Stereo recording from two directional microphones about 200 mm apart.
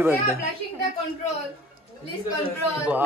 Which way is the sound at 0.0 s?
10° right (ahead or behind).